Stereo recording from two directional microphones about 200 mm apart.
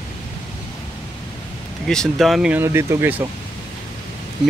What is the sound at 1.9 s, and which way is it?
Speech, centre (ahead or behind).